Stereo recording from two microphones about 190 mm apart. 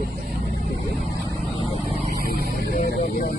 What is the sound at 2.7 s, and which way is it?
Vehicle, 45° left (ahead or behind).